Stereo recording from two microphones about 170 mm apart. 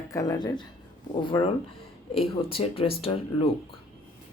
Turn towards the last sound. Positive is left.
turn(degrees=35)  # may be behind; listen again after turning